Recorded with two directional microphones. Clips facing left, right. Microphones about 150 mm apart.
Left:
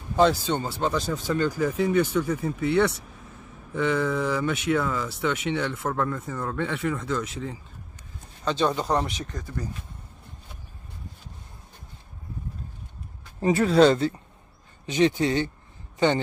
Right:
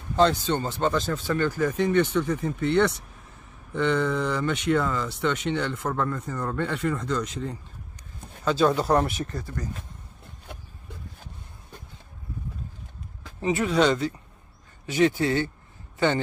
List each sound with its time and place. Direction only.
0.1 s speech: 5° left (ahead or behind)
13.4 s speech: 35° left (ahead or behind)
14.9 s speech: 20° left (ahead or behind)